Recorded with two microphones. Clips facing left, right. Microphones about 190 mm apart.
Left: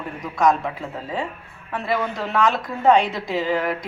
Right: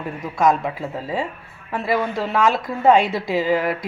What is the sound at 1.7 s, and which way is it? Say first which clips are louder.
A woman's voice: right 2 dB; 10° right (ahead or behind).